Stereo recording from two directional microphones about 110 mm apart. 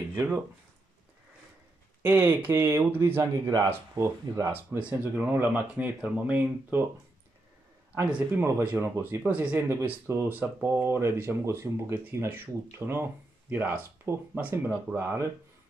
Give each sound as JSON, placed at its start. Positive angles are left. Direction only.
{"t": 0.1, "sound": "speech", "side_deg": -25}
{"t": 2.0, "sound": "speech", "side_deg": -15}
{"t": 4.5, "sound": "speech", "side_deg": -20}
{"t": 7.9, "sound": "speech", "side_deg": -15}
{"t": 9.7, "sound": "speech", "side_deg": -25}